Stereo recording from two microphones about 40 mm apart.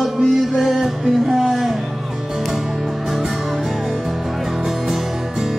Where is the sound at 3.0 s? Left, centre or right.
Centre.